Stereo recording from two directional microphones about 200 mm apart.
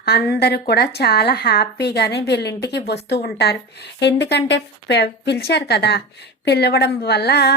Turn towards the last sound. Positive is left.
turn(degrees=55)  # may be behind; listen again after turning